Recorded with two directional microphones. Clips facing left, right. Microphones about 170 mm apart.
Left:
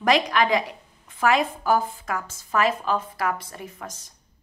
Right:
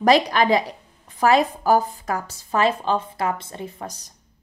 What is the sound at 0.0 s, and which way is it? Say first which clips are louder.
A woman's voice: right 4 dB; 35° right (ahead or behind).